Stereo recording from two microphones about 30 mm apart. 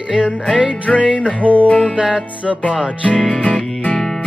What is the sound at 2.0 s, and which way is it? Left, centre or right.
Music, right.